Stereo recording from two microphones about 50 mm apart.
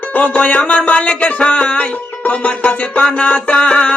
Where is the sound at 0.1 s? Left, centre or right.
Left.